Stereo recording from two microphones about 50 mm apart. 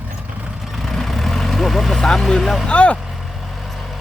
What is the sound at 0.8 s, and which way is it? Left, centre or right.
Vehicle, centre.